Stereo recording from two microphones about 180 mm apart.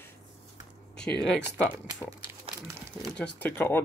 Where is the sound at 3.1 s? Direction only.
5° left (ahead or behind).